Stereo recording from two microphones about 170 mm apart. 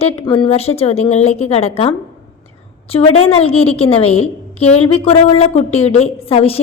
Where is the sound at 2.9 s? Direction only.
35° left (ahead or behind).